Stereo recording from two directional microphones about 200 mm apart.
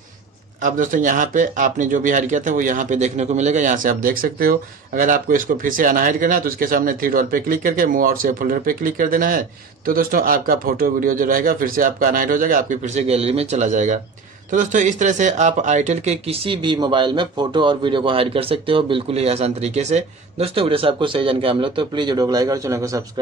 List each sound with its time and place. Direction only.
0.6 s speech: 40° right (ahead or behind); by 23.0 s 15° right (ahead or behind)